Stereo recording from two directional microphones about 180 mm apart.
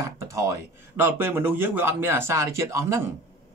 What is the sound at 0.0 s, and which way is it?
Speech, 15° right (ahead or behind).